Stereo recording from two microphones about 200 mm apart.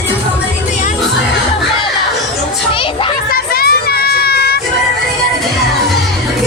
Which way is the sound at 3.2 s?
50° left (ahead or behind).